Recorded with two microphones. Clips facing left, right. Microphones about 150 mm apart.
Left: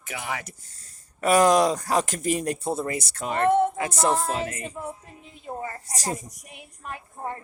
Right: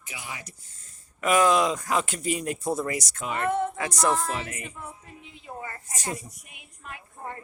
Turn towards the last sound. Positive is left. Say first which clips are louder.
# left 6 dB
turn(degrees=40)  # may be behind; listen again after turning